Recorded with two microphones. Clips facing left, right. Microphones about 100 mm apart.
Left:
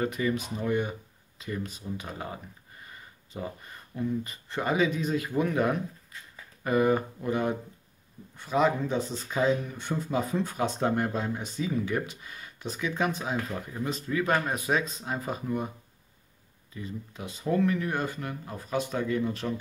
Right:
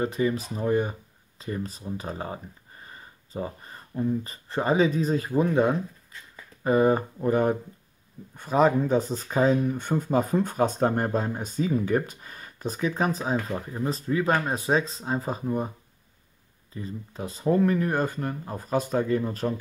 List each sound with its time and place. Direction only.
0.0 s speech: 30° right (ahead or behind)
16.7 s speech: 35° right (ahead or behind)